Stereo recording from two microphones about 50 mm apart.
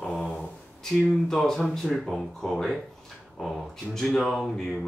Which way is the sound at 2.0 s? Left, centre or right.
Centre.